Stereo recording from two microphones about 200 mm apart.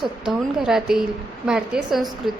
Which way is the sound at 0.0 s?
Centre (ahead or behind).